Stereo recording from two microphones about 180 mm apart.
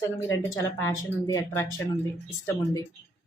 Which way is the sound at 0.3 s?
15° left (ahead or behind).